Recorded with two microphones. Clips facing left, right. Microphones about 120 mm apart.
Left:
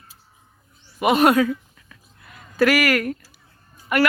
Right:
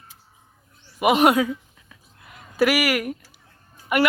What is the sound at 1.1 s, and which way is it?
Speech, 15° right (ahead or behind).